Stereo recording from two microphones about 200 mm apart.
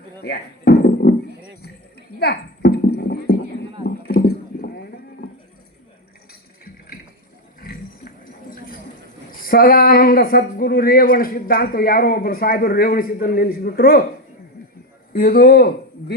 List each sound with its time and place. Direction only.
0.2 s music: 50° left (ahead or behind)
2.1 s horse: 50° left (ahead or behind)
3.8 s clip-clop: 50° left (ahead or behind)
7.6 s a sound: 45° left (ahead or behind)
9.4 s speech: 45° left (ahead or behind)
15.1 s speech: 50° left (ahead or behind)